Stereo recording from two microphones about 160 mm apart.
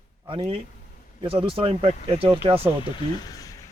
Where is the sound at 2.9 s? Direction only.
25° left (ahead or behind).